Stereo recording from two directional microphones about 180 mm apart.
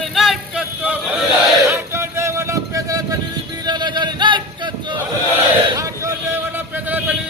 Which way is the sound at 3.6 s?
25° right (ahead or behind).